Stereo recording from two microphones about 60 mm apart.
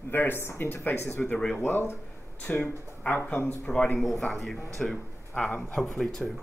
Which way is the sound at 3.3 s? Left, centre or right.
Left.